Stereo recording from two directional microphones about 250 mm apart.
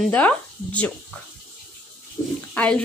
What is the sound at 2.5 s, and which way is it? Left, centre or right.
Speech, centre.